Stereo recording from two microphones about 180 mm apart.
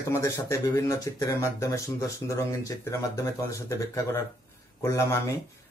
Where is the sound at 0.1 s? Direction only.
15° left (ahead or behind).